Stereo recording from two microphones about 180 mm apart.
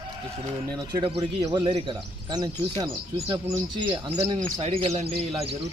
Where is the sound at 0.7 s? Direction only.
20° right (ahead or behind).